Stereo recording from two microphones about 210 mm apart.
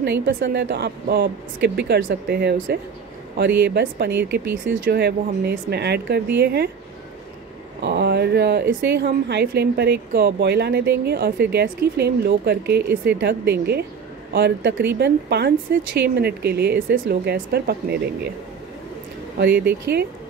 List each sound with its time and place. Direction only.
0.0 s a woman's voice: 60° right (ahead or behind)
7.8 s a woman's voice: 50° right (ahead or behind)
19.3 s speech: 55° right (ahead or behind)